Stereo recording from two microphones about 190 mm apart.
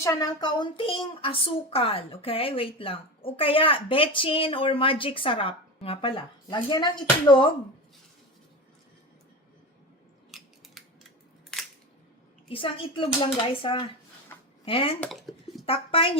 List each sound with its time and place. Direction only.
0.0 s a woman's voice: 20° left (ahead or behind)
10.3 s scissors: centre (ahead or behind)
12.5 s a woman's voice: 30° left (ahead or behind)
15.0 s a sound: centre (ahead or behind)
15.6 s a woman's voice: 30° left (ahead or behind)